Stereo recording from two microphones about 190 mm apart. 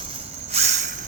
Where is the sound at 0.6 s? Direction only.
40° right (ahead or behind).